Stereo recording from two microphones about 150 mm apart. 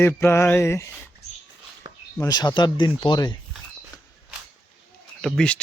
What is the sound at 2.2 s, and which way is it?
Speech, 25° left (ahead or behind).